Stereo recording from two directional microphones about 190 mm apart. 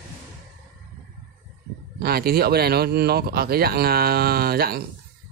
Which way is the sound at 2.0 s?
55° right (ahead or behind).